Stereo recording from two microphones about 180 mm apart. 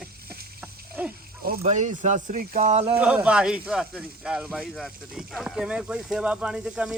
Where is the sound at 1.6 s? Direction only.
45° right (ahead or behind).